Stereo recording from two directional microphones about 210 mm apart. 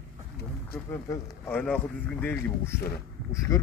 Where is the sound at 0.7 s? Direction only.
10° left (ahead or behind).